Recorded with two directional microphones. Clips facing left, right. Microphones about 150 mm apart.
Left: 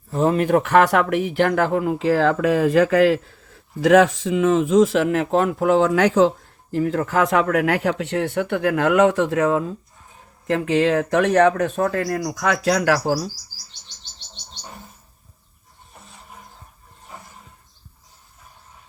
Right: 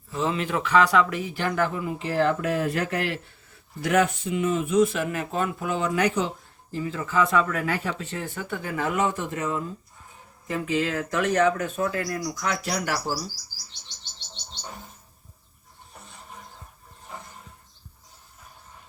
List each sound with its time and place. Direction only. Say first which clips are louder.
0.1 s speech: left 9 dB; 50° left (ahead or behind); by 9.7 s 90° left
10.4 s speech: left 8 dB; 75° left (ahead or behind)
11.8 s speech: left 6 dB; 80° left